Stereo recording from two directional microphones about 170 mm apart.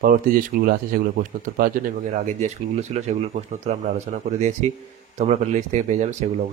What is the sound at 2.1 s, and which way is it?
Speech, 45° right (ahead or behind).